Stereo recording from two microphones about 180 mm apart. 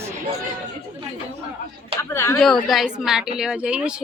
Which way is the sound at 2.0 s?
15° left (ahead or behind).